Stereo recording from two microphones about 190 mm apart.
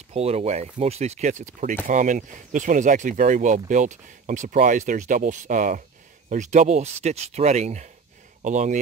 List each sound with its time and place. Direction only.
0.1 s speech: 35° right (ahead or behind)